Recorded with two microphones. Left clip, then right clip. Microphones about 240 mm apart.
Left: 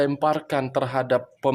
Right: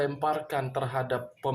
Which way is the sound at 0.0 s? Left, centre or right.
Left.